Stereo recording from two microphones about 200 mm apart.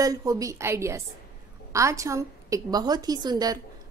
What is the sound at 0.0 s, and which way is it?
A woman's voice, 15° right (ahead or behind).